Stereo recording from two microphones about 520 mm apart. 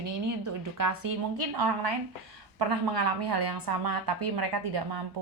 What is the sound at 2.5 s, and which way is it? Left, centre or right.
A woman's voice, right.